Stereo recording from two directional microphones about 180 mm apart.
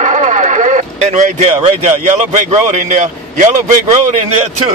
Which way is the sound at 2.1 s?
45° right (ahead or behind).